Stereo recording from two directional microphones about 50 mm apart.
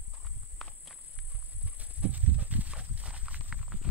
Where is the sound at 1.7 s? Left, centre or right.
Right.